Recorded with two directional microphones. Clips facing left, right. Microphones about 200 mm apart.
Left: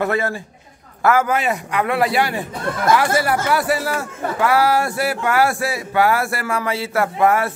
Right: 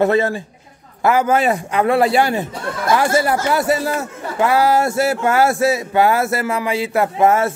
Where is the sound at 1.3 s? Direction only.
30° right (ahead or behind).